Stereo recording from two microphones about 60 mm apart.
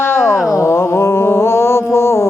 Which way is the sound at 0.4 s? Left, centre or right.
Left.